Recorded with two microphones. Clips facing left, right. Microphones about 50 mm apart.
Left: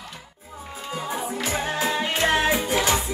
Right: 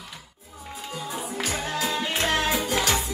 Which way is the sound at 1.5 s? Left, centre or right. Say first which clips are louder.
Left 3 dB; left.